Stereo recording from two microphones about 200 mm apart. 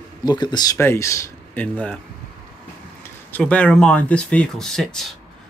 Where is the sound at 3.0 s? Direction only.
5° left (ahead or behind).